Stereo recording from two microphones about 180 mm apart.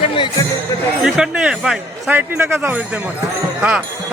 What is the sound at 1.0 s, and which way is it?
A man's voice, 5° right (ahead or behind).